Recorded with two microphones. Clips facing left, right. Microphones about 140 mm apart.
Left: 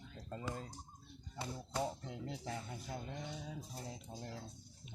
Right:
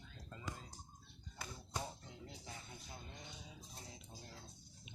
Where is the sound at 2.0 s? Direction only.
85° left.